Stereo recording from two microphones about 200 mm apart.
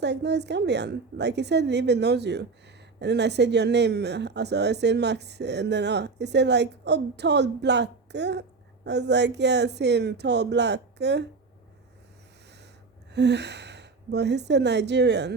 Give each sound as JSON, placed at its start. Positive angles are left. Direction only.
{"t": 0.0, "sound": "a woman's voice", "side_deg": -60}
{"t": 13.1, "sound": "a woman's voice", "side_deg": -60}